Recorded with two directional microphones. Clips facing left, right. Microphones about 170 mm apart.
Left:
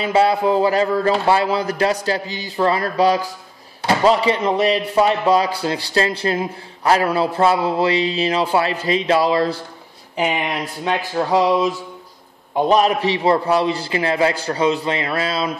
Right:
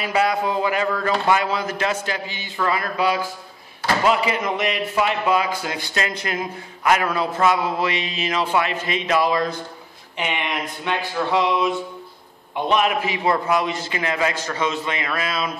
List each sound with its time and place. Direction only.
0.0 s speech: 30° left (ahead or behind)